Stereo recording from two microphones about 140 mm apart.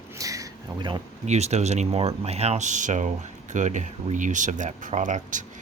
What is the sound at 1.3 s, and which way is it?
Speech, 50° right (ahead or behind).